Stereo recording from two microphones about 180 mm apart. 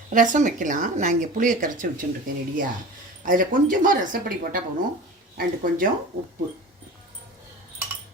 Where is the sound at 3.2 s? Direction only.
45° right (ahead or behind).